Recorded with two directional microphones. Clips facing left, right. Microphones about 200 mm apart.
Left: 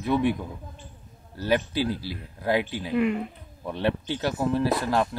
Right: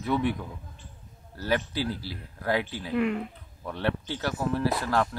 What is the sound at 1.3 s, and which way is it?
Speech, 20° left (ahead or behind).